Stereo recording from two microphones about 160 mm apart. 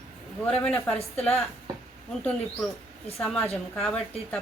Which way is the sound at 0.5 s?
Centre (ahead or behind).